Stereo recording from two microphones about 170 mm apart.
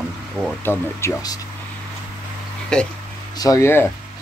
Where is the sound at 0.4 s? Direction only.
10° right (ahead or behind).